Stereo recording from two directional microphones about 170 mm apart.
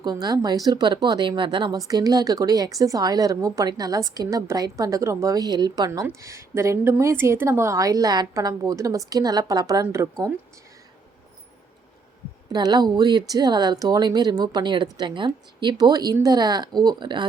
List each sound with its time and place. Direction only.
0.0 s a woman's voice: 25° right (ahead or behind)
12.5 s a woman's voice: 25° right (ahead or behind)